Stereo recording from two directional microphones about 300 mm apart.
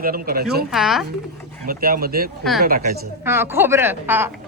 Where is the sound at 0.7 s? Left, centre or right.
Centre.